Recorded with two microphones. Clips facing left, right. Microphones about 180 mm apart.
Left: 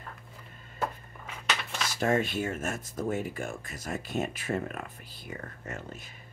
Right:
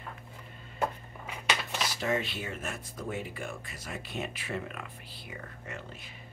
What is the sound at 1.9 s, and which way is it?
Speech, 50° left (ahead or behind).